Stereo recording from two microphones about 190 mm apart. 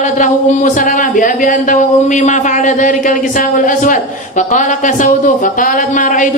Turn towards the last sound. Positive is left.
turn(degrees=45)  # may be behind; listen again after turning